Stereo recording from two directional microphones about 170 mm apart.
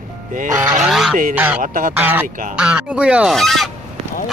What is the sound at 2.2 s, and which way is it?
Speech, 50° right (ahead or behind).